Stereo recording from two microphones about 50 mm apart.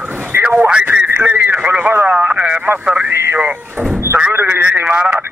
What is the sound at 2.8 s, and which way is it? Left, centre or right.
Speech, right.